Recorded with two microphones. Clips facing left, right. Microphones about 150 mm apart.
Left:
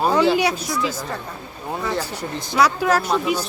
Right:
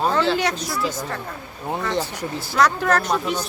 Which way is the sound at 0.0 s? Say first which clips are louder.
Left 3 dB; 10° left (ahead or behind).